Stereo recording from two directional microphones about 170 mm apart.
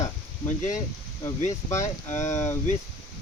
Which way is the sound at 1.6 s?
15° left (ahead or behind).